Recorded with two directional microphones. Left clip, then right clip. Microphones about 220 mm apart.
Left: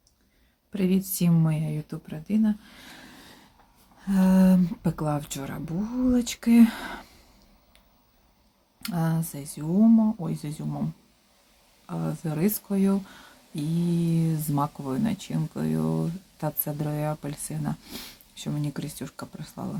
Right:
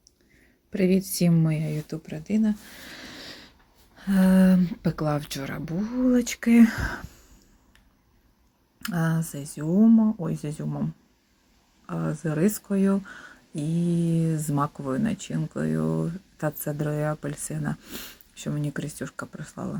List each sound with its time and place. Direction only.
0.7 s speech: 10° right (ahead or behind)
3.0 s a sound: 30° right (ahead or behind)
4.0 s speech: 10° right (ahead or behind)
8.8 s speech: 10° right (ahead or behind)
11.9 s speech: 10° right (ahead or behind)